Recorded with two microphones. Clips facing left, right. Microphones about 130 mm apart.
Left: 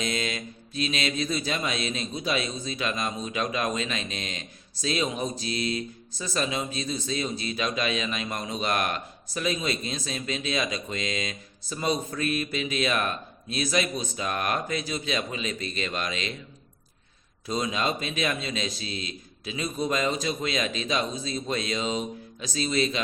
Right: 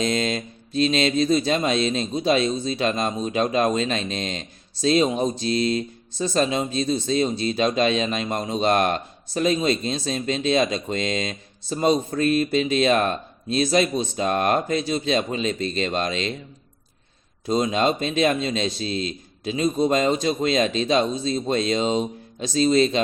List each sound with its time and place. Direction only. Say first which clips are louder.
0.0 s speech: right 7 dB; 35° right (ahead or behind)
17.4 s speech: right 7 dB; 30° right (ahead or behind)